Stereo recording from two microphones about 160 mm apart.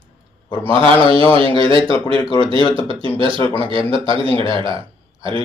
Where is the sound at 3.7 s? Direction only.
35° right (ahead or behind).